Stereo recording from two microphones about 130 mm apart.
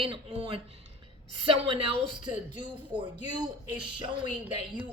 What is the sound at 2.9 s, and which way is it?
Speech, 35° right (ahead or behind).